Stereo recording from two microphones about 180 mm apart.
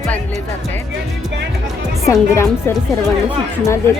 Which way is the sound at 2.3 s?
15° left (ahead or behind).